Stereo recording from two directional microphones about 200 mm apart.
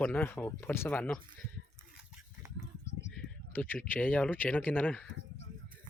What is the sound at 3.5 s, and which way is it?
Speech, 10° left (ahead or behind).